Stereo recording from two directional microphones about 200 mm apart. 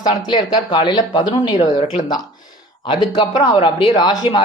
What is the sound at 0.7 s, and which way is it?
Speech, 20° left (ahead or behind).